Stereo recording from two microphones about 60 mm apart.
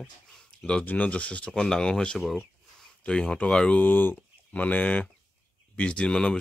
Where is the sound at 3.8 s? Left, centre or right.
Left.